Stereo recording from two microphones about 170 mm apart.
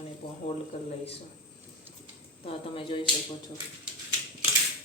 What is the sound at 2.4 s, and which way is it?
Speech, 30° left (ahead or behind).